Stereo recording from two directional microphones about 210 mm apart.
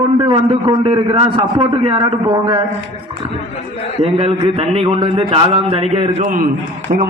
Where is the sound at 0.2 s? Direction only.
25° right (ahead or behind).